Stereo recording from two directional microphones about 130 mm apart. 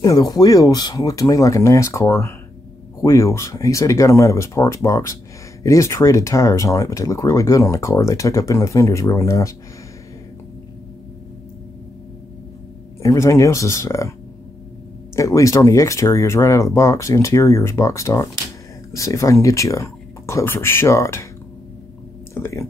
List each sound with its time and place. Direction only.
0.0 s speech: 30° left (ahead or behind)
13.0 s speech: 25° left (ahead or behind)
15.1 s speech: 25° left (ahead or behind)
22.3 s speech: 20° left (ahead or behind)